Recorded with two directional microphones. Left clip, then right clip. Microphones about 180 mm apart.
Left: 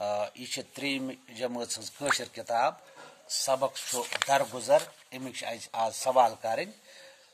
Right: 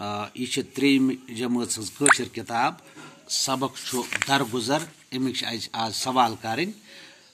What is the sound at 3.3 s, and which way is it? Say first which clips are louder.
Speech: right 2 dB; 55° left (ahead or behind).